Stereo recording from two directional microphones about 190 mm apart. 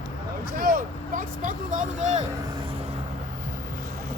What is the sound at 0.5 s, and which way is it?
Vehicle, 50° right (ahead or behind).